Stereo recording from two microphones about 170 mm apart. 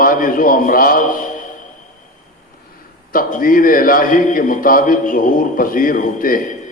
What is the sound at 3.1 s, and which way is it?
A man's voice, 55° left (ahead or behind).